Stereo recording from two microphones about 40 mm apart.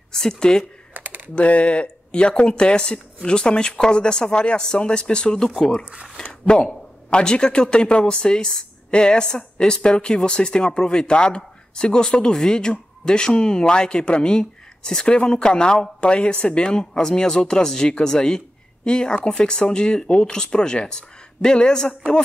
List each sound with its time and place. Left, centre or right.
0.1 s speech: centre
0.9 s computer keyboard: right
1.3 s a man's voice: left